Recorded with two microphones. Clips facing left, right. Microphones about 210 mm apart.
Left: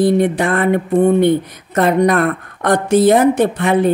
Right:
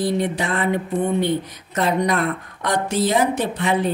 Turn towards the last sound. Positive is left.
turn(degrees=55)  # may be behind; listen again after turning